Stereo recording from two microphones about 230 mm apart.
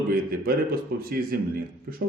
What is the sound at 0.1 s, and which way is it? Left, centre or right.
A man's voice, right.